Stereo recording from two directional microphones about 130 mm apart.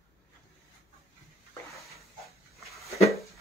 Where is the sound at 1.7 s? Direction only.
Centre (ahead or behind).